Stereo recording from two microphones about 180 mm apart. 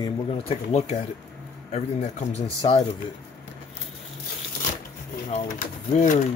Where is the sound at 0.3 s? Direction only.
35° left (ahead or behind).